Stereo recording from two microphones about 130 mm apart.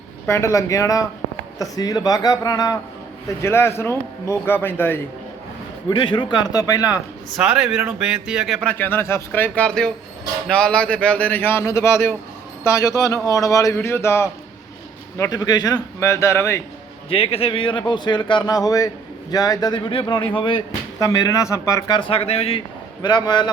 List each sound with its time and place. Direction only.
0.3 s speech: 20° left (ahead or behind)
5.9 s speech: 40° left (ahead or behind)
7.3 s speech: 5° right (ahead or behind)
8.6 s a man's voice: 15° left (ahead or behind)
15.3 s speech: 30° left (ahead or behind)
17.1 s speech: 45° left (ahead or behind)
21.0 s speech: 25° left (ahead or behind); by 22.6 s 50° left (ahead or behind)
23.0 s speech: 35° left (ahead or behind)